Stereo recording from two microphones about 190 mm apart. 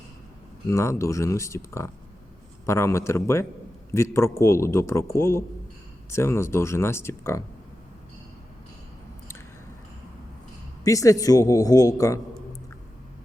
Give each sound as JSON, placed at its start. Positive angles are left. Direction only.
{"t": 0.7, "sound": "speech", "side_deg": 15}
{"t": 10.8, "sound": "speech", "side_deg": 15}